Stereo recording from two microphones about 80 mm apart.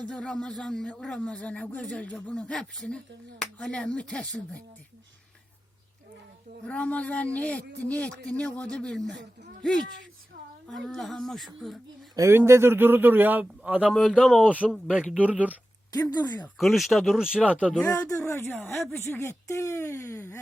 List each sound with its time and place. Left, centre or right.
0.1 s speech: centre
6.7 s speech: centre
10.7 s speech: centre
12.3 s speech: right
15.9 s speech: left
16.6 s speech: centre
17.8 s speech: left